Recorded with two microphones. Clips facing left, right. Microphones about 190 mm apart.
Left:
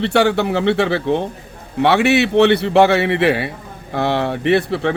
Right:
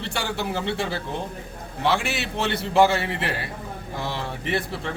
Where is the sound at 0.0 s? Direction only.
65° left (ahead or behind).